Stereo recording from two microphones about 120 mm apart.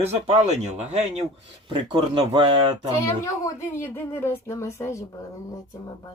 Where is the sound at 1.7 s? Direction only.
40° right (ahead or behind).